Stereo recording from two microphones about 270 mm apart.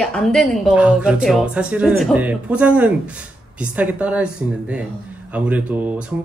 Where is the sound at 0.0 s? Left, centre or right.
Centre.